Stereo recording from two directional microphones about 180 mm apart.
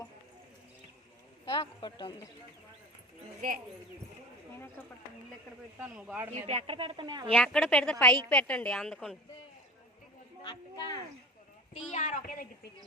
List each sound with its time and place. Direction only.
1.5 s speech: 30° left (ahead or behind)
5.8 s speech: 5° right (ahead or behind)
6.3 s a woman's voice: 35° right (ahead or behind)
7.3 s a woman's voice: 5° left (ahead or behind)
10.4 s speech: 25° left (ahead or behind)
11.9 s a woman's voice: 45° left (ahead or behind)